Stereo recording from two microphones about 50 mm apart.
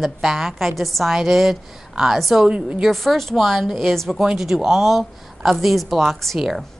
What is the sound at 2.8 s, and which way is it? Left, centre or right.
A woman's voice, centre.